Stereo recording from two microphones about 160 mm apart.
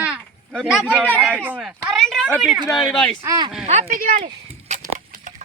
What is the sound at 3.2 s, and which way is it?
Speech, 25° right (ahead or behind).